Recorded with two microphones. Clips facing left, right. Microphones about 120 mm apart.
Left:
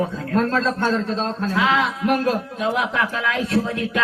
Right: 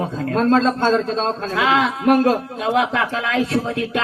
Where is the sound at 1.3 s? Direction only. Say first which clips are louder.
Right 1 dB; 90° right.